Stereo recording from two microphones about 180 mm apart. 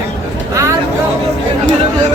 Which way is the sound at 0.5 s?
15° right (ahead or behind).